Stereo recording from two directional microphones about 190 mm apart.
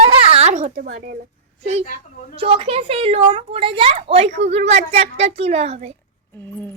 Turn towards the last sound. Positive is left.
turn(degrees=-35)  # may be behind; listen again after turning